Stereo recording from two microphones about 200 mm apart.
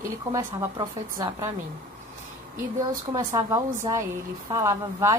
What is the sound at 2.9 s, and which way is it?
Speech, 20° right (ahead or behind).